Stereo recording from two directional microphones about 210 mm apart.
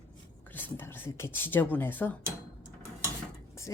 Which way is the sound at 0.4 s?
10° left (ahead or behind).